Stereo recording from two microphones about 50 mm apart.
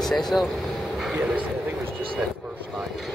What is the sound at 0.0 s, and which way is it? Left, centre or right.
Speech, centre.